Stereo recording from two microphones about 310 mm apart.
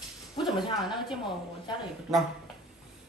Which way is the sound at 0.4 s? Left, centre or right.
Centre.